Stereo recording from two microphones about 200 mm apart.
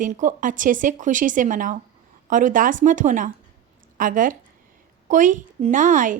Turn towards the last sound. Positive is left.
turn(degrees=-40)  # may be behind; listen again after turning